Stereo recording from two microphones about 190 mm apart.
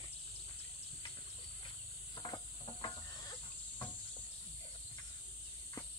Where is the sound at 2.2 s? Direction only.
25° left (ahead or behind).